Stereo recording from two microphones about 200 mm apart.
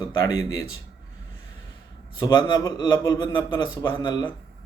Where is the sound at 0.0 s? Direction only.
20° left (ahead or behind).